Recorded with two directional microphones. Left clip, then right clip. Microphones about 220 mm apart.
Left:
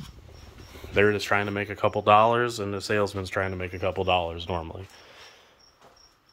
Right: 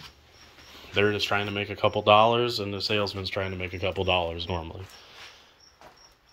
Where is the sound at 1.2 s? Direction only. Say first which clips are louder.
Left 1 dB; 25° left (ahead or behind).